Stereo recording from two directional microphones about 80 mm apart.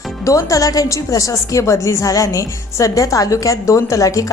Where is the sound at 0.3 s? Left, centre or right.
Left.